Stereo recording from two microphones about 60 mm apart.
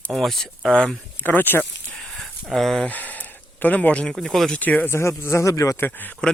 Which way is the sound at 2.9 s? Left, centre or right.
Left.